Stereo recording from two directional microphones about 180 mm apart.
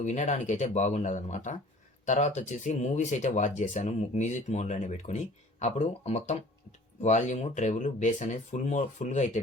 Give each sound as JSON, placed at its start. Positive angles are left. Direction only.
{"t": 0.0, "sound": "speech", "side_deg": 40}